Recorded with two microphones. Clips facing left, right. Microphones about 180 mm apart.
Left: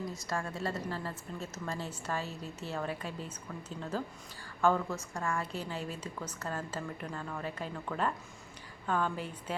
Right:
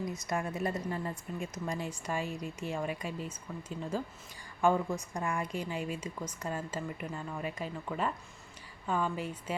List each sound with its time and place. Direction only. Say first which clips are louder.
0.0 s a woman's voice: right 2 dB; 20° right (ahead or behind)